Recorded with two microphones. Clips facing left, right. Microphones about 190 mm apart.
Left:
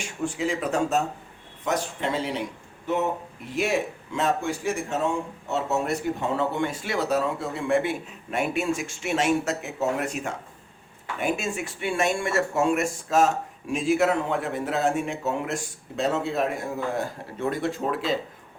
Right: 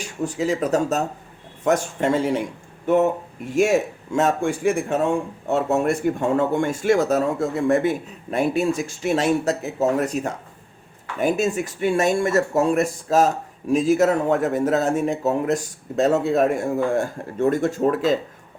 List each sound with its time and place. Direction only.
0.0 s a man's voice: 40° right (ahead or behind)